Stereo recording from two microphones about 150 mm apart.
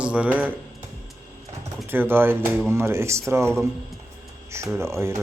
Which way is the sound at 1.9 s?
15° right (ahead or behind).